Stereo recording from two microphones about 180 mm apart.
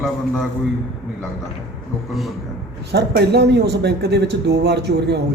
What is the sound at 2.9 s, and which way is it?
A man's voice, 65° right (ahead or behind).